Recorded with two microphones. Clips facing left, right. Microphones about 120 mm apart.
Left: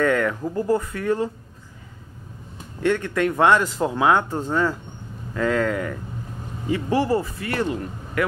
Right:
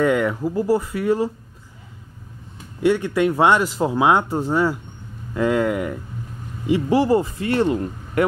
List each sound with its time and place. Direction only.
0.0 s speech: 15° right (ahead or behind)
2.8 s speech: 15° right (ahead or behind)
7.3 s speech: 30° right (ahead or behind)